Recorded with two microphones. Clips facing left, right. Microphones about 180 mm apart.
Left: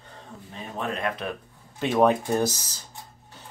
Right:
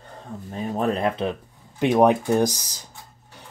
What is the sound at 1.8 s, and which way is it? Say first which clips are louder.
Speech: right 3 dB; 15° right (ahead or behind).